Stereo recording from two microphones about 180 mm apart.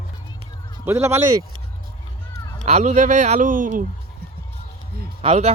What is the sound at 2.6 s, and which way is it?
Speech, 40° right (ahead or behind).